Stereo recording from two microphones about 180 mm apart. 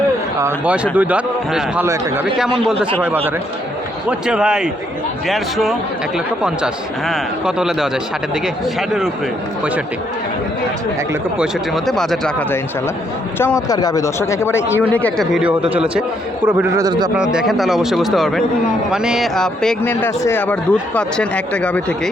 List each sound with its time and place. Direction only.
0.3 s a man's voice: 10° right (ahead or behind)
4.3 s speech: 5° right (ahead or behind)
11.1 s speech: 5° right (ahead or behind)
13.4 s speech: 20° left (ahead or behind)
15.3 s a man's voice: 5° right (ahead or behind)
16.8 s speech: 25° right (ahead or behind)
17.3 s speech: centre (ahead or behind)